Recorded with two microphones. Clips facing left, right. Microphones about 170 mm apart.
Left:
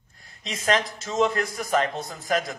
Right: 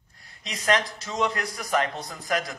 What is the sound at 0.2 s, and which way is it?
A man's voice, 25° left (ahead or behind).